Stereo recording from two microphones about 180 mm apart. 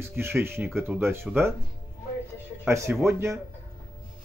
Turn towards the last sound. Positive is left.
turn(degrees=-15)  # may be behind; listen again after turning